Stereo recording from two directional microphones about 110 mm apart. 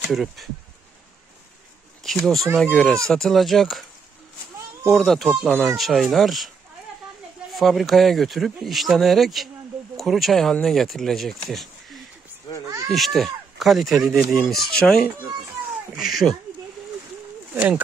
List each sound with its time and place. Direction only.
0.1 s speech: centre (ahead or behind)
2.0 s speech: 5° left (ahead or behind)
4.8 s speech: centre (ahead or behind)
7.5 s speech: centre (ahead or behind)
12.6 s speech: 30° right (ahead or behind)
12.9 s speech: centre (ahead or behind)